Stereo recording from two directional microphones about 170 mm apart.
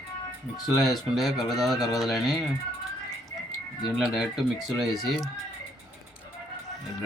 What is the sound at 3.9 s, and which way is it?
Speech, centre (ahead or behind).